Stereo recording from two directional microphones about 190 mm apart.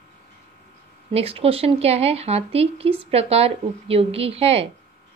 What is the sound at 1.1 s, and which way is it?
Speech, 30° right (ahead or behind).